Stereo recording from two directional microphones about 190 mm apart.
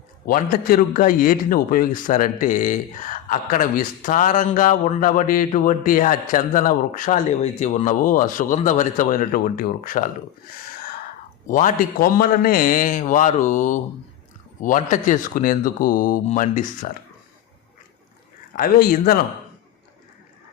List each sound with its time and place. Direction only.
0.3 s a man's voice: 50° left (ahead or behind)
11.4 s a man's voice: 45° left (ahead or behind)
18.5 s a man's voice: 50° left (ahead or behind)